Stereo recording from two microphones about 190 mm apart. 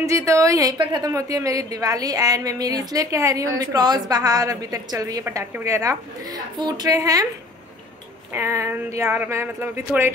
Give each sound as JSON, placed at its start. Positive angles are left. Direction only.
{"t": 0.0, "sound": "a woman's voice", "side_deg": -15}
{"t": 8.3, "sound": "speech", "side_deg": -10}